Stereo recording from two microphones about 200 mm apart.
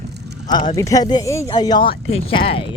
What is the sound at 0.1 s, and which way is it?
Vehicle, 55° right (ahead or behind).